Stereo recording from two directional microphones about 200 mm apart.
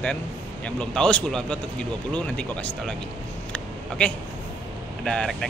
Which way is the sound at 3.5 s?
5° left (ahead or behind).